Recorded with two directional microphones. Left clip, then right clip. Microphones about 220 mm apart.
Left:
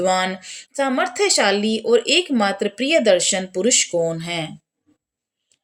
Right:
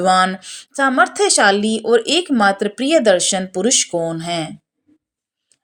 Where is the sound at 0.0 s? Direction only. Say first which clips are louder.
Right 5 dB; 15° right (ahead or behind).